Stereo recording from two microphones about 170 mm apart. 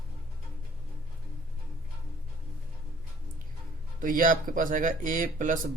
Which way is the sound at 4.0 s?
50° right (ahead or behind).